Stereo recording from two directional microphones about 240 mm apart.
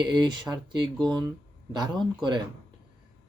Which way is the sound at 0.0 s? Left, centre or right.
Centre.